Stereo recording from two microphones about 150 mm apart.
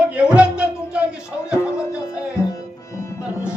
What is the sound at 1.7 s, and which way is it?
Music, 20° left (ahead or behind).